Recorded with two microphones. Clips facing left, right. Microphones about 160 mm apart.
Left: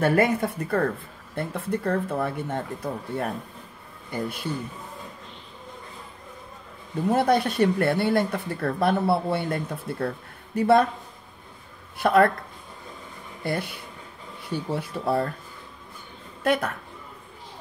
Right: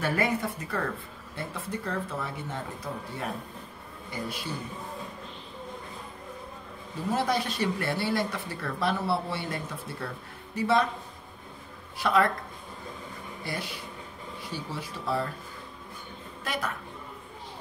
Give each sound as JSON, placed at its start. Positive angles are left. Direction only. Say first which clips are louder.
{"t": 0.0, "sound": "speech", "louder": "left 7 dB", "side_deg": 50}
{"t": 7.1, "sound": "speech", "louder": "left 7 dB", "side_deg": 55}
{"t": 12.0, "sound": "speech", "louder": "left 6 dB", "side_deg": 55}
{"t": 13.4, "sound": "speech", "louder": "left 8 dB", "side_deg": 55}
{"t": 16.4, "sound": "speech", "louder": "left 9 dB", "side_deg": 55}